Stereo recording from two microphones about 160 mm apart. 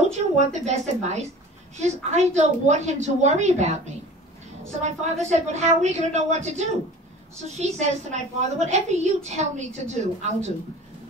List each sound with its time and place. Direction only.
0.5 s a woman's voice: 45° right (ahead or behind)